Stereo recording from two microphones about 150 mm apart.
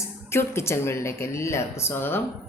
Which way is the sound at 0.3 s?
15° left (ahead or behind).